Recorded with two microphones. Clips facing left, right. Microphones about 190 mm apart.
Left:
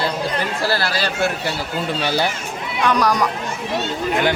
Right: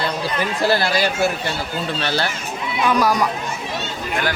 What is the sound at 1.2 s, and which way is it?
Speech, 10° left (ahead or behind).